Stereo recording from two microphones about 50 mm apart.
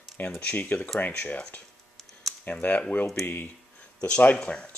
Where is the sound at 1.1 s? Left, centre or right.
Left.